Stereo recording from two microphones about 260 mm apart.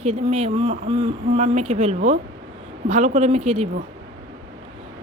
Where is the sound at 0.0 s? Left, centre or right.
Right.